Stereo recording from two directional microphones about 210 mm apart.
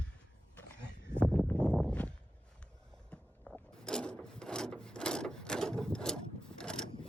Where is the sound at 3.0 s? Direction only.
Centre (ahead or behind).